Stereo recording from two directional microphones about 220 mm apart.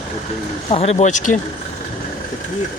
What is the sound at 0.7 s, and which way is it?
Speech, 30° left (ahead or behind).